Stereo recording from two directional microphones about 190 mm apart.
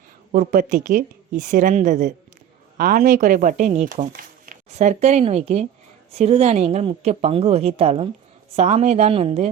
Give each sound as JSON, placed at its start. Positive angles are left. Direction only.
{"t": 0.3, "sound": "speech", "side_deg": -40}